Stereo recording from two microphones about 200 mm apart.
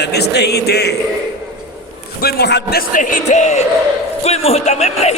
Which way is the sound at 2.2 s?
50° left (ahead or behind).